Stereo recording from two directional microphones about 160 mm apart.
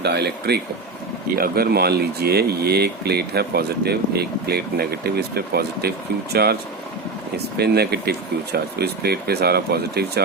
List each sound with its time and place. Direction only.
0.0 s speech: 90° right
1.4 s speech: 75° right (ahead or behind)